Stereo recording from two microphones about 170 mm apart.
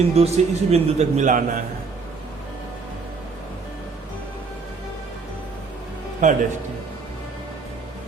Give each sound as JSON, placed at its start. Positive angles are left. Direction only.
{"t": 0.1, "sound": "a man's voice", "side_deg": -35}
{"t": 6.2, "sound": "a man's voice", "side_deg": -45}